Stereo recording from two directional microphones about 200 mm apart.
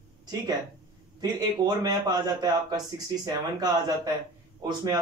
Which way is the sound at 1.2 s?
20° right (ahead or behind).